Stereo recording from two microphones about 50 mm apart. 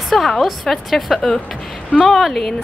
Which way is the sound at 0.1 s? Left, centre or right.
Centre.